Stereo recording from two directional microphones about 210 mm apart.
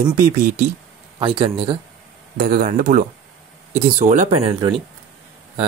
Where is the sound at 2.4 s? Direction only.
40° right (ahead or behind).